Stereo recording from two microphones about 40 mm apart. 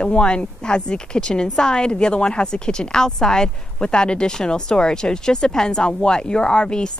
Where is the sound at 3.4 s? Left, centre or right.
Left.